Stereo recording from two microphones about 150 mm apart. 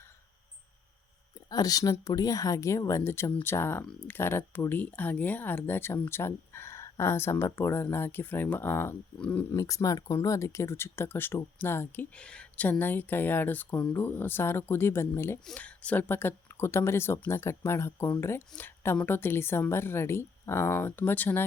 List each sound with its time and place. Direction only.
1.5 s speech: 25° left (ahead or behind)